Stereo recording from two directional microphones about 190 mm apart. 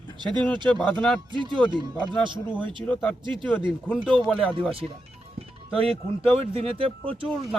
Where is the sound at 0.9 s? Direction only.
5° left (ahead or behind).